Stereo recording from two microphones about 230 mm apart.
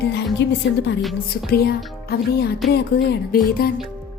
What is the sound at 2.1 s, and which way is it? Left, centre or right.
A woman's voice, left.